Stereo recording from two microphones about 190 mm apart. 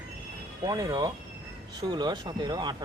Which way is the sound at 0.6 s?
20° right (ahead or behind).